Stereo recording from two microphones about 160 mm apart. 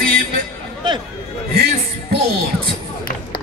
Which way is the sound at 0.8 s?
30° right (ahead or behind).